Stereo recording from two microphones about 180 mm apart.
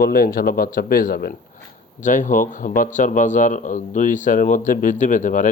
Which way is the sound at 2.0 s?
45° left (ahead or behind).